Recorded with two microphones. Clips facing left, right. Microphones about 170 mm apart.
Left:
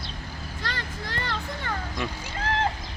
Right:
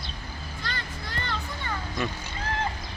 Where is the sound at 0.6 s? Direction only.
90° left.